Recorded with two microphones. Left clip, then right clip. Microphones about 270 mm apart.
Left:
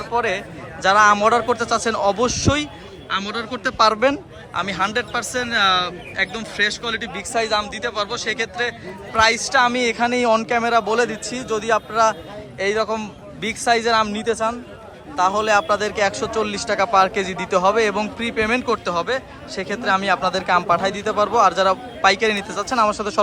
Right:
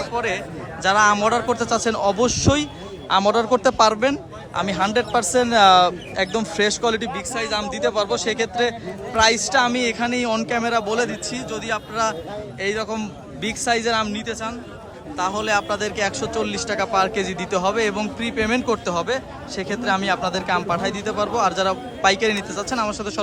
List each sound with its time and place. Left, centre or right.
0.1 s speech: centre
7.2 s speech: centre